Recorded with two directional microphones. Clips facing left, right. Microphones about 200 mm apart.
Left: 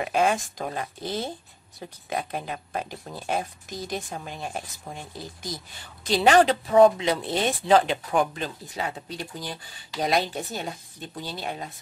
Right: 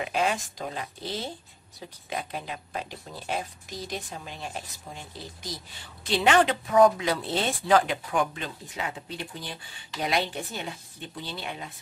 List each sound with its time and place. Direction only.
0.0 s speech: 50° left (ahead or behind)
6.0 s speech: 35° left (ahead or behind); by 7.7 s 15° left (ahead or behind)
7.7 s speech: 30° left (ahead or behind)